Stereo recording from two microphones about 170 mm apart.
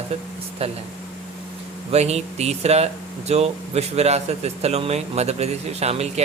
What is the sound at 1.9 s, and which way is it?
Speech, 40° right (ahead or behind).